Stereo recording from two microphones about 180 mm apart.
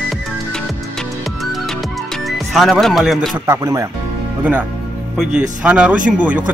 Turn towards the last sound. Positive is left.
turn(degrees=-10)  # may be behind; listen again after turning